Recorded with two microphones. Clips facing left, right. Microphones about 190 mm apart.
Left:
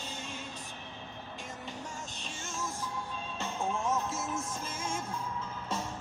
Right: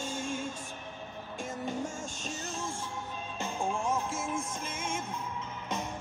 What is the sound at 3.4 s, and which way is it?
Music, 15° right (ahead or behind).